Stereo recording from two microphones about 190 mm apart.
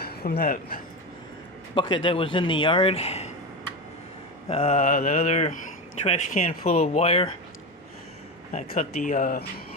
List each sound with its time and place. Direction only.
0.0 s speech: 55° left (ahead or behind)
1.7 s a man's voice: 25° left (ahead or behind)
4.4 s speech: 30° left (ahead or behind)
8.5 s speech: 40° left (ahead or behind)